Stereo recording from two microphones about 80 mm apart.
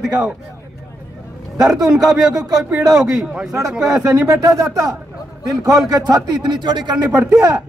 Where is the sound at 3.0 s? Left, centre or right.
Centre.